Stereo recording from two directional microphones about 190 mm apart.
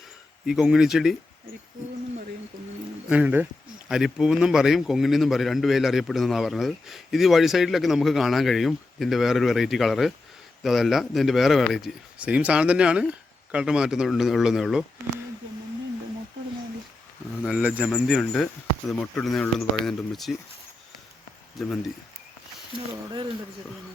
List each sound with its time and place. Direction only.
0.4 s a man's voice: 5° right (ahead or behind)
3.1 s a man's voice: 10° right (ahead or behind)
17.4 s a man's voice: 5° right (ahead or behind)
22.9 s speech: 25° right (ahead or behind)